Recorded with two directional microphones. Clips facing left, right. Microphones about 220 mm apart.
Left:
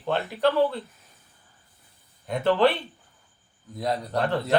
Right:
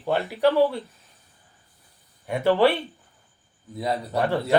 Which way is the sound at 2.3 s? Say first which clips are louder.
Right 2 dB; 10° right (ahead or behind).